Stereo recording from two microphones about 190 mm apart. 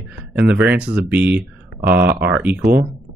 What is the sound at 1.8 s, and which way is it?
Speech, 55° right (ahead or behind).